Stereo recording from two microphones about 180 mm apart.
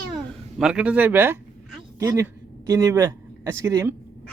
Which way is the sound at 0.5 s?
5° right (ahead or behind).